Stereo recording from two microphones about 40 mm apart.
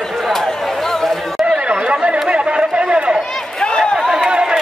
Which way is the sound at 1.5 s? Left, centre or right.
Right.